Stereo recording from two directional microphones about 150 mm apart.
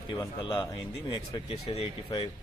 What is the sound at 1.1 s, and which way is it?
Speech, 40° left (ahead or behind).